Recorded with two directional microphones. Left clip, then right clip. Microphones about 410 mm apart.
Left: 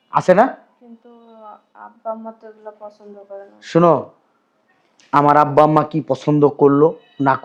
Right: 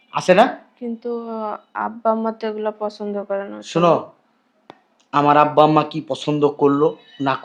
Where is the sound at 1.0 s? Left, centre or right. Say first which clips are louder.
Right 16 dB; right.